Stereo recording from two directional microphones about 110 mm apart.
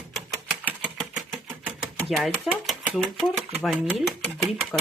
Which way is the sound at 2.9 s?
10° left (ahead or behind).